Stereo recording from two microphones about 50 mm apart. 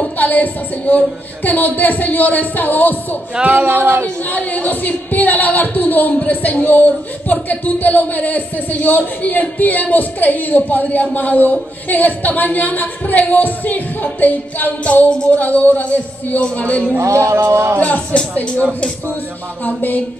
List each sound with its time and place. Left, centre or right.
0.0 s speech: left
3.4 s speech: right
4.3 s speech: left
14.9 s speech: left
17.0 s music: right
17.5 s music: right
17.7 s speech: left
19.6 s speech: left